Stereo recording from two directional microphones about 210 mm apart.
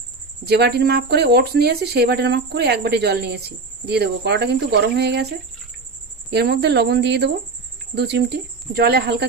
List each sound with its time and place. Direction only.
0.4 s speech: 50° right (ahead or behind)
6.3 s speech: 50° right (ahead or behind)